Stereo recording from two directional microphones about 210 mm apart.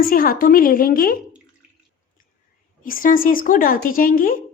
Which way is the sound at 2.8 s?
40° left (ahead or behind).